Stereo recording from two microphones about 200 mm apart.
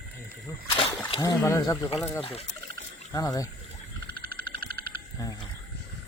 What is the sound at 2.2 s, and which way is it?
Speech, 30° left (ahead or behind).